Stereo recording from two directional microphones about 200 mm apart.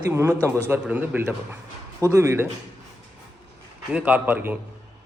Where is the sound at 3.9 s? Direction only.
5° right (ahead or behind).